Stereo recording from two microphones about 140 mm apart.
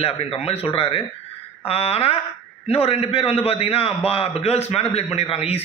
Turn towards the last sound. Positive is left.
turn(degrees=45)  # may be behind; listen again after turning